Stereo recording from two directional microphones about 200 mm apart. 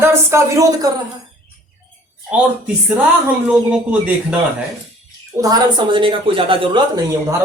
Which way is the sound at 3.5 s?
5° right (ahead or behind).